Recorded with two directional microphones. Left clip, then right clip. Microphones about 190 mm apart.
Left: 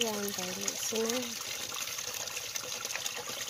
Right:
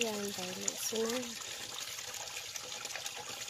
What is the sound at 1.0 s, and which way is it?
Speech, 30° left (ahead or behind).